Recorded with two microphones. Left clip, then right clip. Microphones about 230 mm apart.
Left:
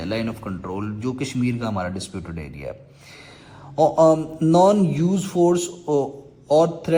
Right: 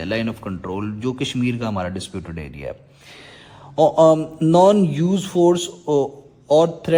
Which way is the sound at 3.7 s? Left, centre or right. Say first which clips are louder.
Right 2 dB; right.